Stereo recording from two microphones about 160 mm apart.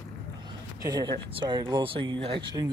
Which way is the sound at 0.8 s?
25° right (ahead or behind).